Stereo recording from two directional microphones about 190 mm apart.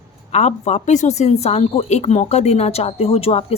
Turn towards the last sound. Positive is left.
turn(degrees=30)  # may be behind; listen again after turning